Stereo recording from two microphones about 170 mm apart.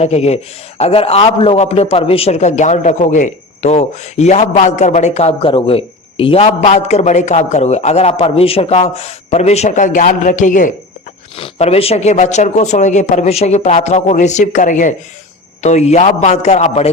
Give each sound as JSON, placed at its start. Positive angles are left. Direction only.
{"t": 0.0, "sound": "a man's voice", "side_deg": 40}
{"t": 11.3, "sound": "a man's voice", "side_deg": 35}